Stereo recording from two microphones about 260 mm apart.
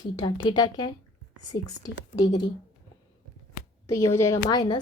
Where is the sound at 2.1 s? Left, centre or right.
Centre.